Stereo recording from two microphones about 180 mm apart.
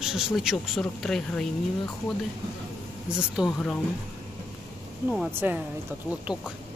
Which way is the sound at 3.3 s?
Centre (ahead or behind).